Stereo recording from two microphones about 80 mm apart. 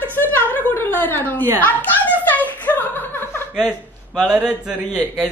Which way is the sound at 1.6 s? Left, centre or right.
Left.